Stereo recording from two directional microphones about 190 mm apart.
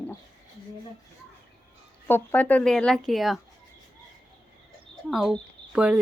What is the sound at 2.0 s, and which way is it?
Speech, 10° left (ahead or behind).